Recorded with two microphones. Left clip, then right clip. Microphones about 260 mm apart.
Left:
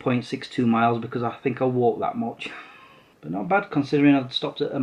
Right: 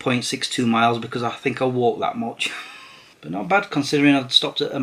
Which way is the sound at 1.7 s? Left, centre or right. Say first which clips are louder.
Right 1 dB; left.